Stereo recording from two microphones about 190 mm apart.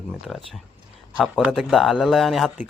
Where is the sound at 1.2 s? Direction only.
Centre (ahead or behind).